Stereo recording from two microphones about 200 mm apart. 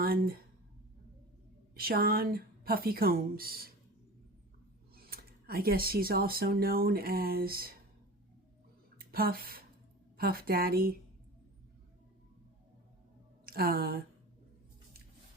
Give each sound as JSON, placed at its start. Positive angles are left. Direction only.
{"t": 0.0, "sound": "speech", "side_deg": -50}
{"t": 1.7, "sound": "a woman's voice", "side_deg": -50}
{"t": 4.9, "sound": "speech", "side_deg": -50}
{"t": 9.0, "sound": "a woman's voice", "side_deg": -45}
{"t": 13.4, "sound": "a woman's voice", "side_deg": -50}